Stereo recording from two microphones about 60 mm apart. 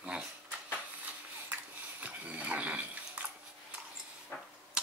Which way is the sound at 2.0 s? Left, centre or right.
Right.